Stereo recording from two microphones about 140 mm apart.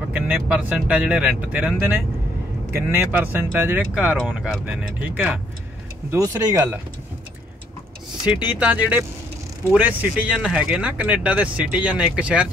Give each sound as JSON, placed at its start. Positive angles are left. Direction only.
{"t": 0.1, "sound": "speech", "side_deg": -10}
{"t": 2.9, "sound": "speech", "side_deg": -15}
{"t": 6.1, "sound": "speech", "side_deg": -25}
{"t": 8.3, "sound": "speech", "side_deg": -10}